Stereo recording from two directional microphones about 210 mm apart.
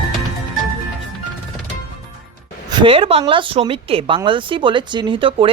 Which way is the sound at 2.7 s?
25° right (ahead or behind).